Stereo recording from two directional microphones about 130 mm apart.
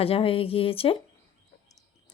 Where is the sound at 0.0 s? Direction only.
45° left (ahead or behind).